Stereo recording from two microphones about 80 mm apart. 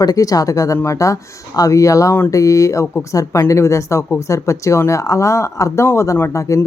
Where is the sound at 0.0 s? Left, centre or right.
Left.